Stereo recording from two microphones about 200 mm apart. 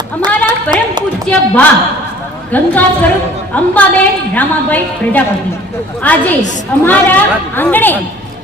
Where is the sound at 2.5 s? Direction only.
10° left (ahead or behind).